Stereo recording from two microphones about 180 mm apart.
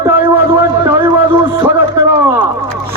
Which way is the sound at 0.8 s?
10° right (ahead or behind).